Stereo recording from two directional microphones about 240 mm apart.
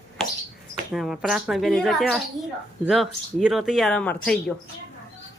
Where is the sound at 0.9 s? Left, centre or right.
Centre.